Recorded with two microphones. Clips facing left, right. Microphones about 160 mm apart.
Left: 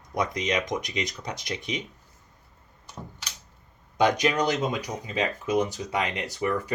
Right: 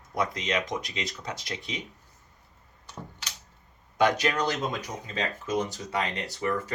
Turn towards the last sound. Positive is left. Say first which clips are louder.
# left 2 dB
turn(degrees=15)  # may be behind; listen again after turning